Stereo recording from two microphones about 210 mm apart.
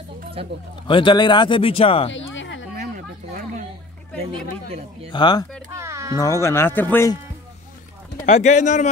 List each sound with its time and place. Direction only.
0.8 s speech: 25° left (ahead or behind)
2.1 s a sound: 60° left (ahead or behind)
5.1 s speech: 20° left (ahead or behind)
5.7 s a sound: 15° right (ahead or behind)
6.1 s speech: 15° left (ahead or behind)
8.3 s speech: 35° left (ahead or behind)